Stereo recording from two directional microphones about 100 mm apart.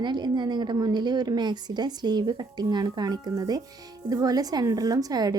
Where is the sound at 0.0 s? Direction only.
50° right (ahead or behind).